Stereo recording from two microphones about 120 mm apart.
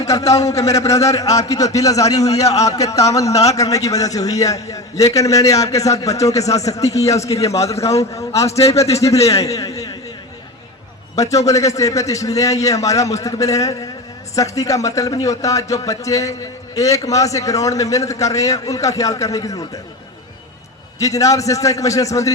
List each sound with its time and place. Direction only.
0.0 s a man's voice: 25° left (ahead or behind)
9.2 s a man's voice: 25° left (ahead or behind)
11.1 s a man's voice: 30° left (ahead or behind)
21.0 s a man's voice: 25° left (ahead or behind)